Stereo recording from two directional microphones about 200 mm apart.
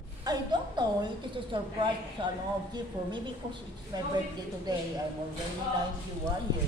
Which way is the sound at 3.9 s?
20° right (ahead or behind).